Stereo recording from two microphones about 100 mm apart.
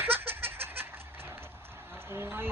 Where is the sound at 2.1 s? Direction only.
25° right (ahead or behind).